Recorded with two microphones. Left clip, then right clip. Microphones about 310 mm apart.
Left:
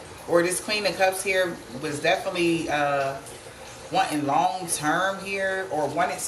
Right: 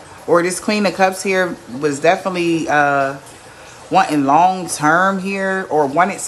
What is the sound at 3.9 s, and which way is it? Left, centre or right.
Speech, centre.